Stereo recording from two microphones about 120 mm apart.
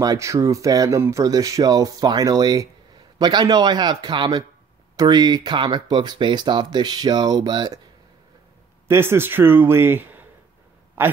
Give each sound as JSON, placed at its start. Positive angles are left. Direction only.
{"t": 0.0, "sound": "speech", "side_deg": -30}
{"t": 8.8, "sound": "a man's voice", "side_deg": -20}